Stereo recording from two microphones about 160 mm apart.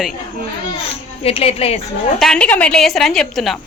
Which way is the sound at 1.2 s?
40° left (ahead or behind).